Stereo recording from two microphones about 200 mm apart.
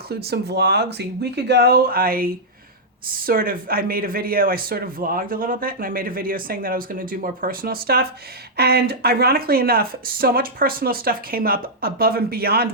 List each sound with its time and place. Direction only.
0.1 s speech: 50° right (ahead or behind)